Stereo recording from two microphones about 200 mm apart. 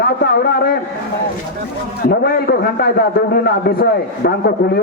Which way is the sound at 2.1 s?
50° left (ahead or behind).